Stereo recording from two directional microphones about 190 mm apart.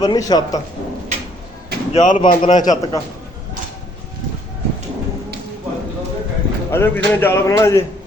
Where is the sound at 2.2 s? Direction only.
25° left (ahead or behind).